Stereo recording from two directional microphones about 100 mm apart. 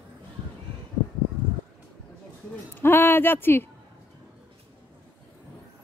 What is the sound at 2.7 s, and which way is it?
Speech, 20° left (ahead or behind).